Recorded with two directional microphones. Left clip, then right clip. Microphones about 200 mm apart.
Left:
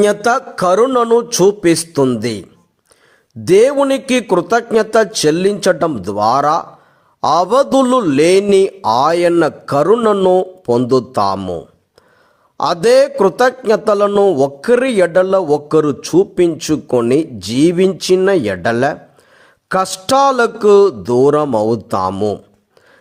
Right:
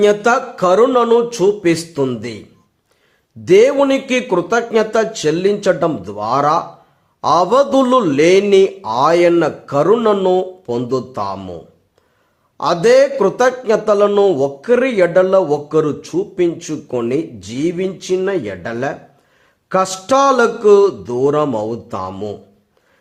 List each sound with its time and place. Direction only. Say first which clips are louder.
0.0 s a man's voice: even; 40° left (ahead or behind)
3.4 s a man's voice: even; 40° left (ahead or behind)